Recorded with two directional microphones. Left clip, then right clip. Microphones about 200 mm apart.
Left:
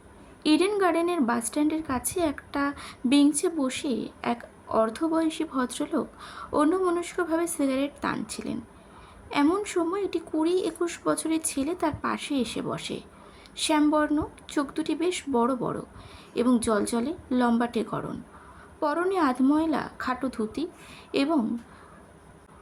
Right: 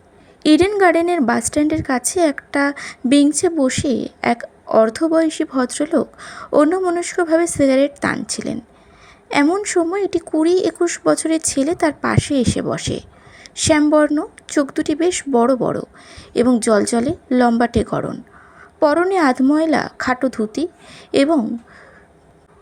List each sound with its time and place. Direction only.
0.4 s a woman's voice: 30° right (ahead or behind)